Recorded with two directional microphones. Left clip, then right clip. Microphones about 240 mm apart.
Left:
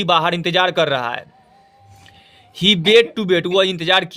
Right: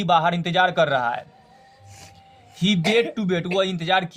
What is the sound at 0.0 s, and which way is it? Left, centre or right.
A man's voice, left.